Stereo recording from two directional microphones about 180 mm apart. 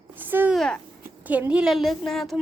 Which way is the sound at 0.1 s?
10° right (ahead or behind).